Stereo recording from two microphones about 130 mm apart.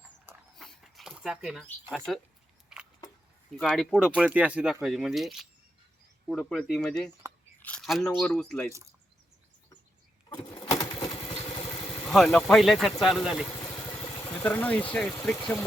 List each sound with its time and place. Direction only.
0.5 s dog: centre (ahead or behind)
2.1 s speech: centre (ahead or behind)
2.7 s a sound: 5° right (ahead or behind)
3.6 s speech: centre (ahead or behind)
7.6 s a sound: 10° left (ahead or behind)
7.9 s speech: centre (ahead or behind)
10.2 s a sound: 30° left (ahead or behind)
11.2 s motorcycle: 45° left (ahead or behind)
12.0 s speech: 5° left (ahead or behind)
13.6 s vehicle: 30° left (ahead or behind)
14.4 s speech: 15° left (ahead or behind)